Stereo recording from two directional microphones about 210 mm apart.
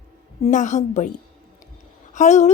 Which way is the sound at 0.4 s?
35° left (ahead or behind).